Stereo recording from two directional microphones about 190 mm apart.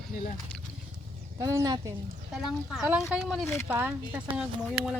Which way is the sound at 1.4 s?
15° right (ahead or behind).